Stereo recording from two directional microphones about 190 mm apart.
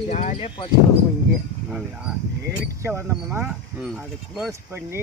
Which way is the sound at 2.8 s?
15° right (ahead or behind).